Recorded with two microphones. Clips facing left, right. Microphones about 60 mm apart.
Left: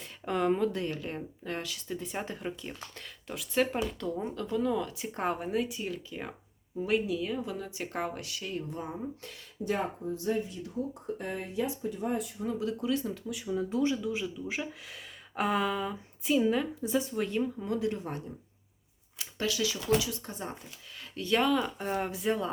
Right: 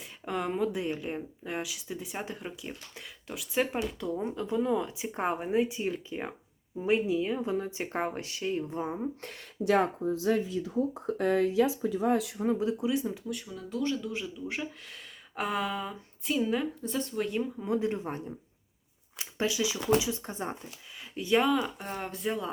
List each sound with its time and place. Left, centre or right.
0.0 s speech: centre; by 9.0 s right
9.6 s speech: right
12.5 s speech: right
13.2 s speech: centre
13.5 s speech: left
13.9 s speech: centre
17.7 s speech: right
21.0 s speech: centre